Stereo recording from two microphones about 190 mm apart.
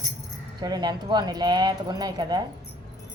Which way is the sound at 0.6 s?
20° right (ahead or behind).